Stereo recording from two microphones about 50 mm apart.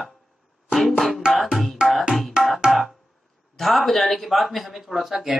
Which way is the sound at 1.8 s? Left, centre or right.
Centre.